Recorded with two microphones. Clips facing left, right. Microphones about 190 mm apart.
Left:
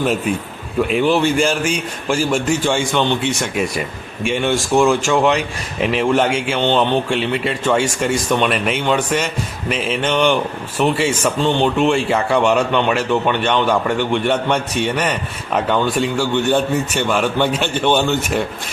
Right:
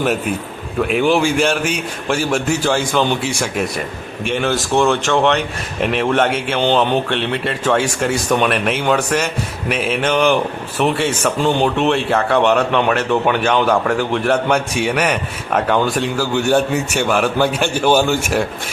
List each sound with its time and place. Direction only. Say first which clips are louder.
0.9 s a man's voice: right 1 dB; 5° right (ahead or behind)